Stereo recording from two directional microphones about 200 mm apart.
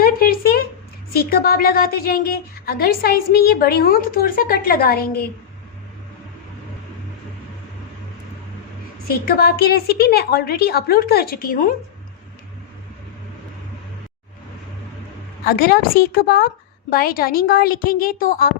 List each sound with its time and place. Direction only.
0.0 s a sound: 45° left (ahead or behind)
1.1 s a woman's voice: 50° left (ahead or behind)
9.0 s a woman's voice: 50° left (ahead or behind)
15.4 s a woman's voice: 50° left (ahead or behind)